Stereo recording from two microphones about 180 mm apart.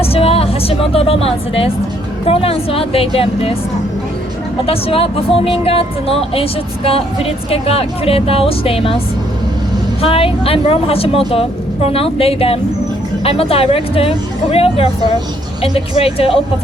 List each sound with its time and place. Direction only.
0.0 s a woman's voice: 35° left (ahead or behind)
4.6 s speech: 30° left (ahead or behind)
10.0 s speech: 30° left (ahead or behind)